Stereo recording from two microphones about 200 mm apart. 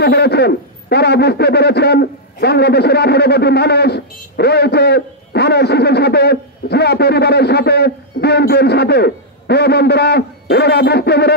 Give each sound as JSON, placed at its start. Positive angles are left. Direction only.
{"t": 0.0, "sound": "speech", "side_deg": 55}